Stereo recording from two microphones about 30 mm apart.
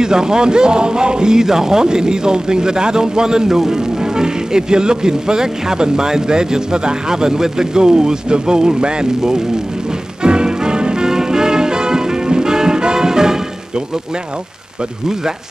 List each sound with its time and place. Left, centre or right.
0.0 s speech: right
10.2 s music: right